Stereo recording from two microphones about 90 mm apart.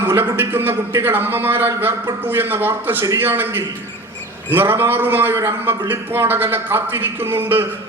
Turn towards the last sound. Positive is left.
turn(degrees=-25)  # may be behind; listen again after turning